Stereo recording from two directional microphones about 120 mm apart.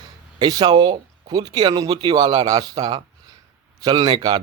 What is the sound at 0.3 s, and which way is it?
Speech, 35° right (ahead or behind).